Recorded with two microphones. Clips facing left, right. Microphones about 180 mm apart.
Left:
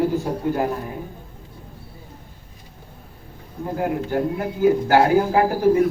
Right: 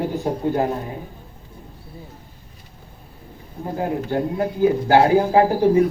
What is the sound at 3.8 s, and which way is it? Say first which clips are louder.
Speech: even; 25° right (ahead or behind).